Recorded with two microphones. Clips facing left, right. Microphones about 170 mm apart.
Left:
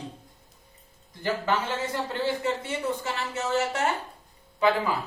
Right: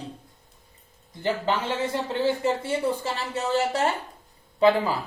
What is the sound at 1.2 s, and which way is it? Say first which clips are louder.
Speech: right 2 dB; 20° right (ahead or behind).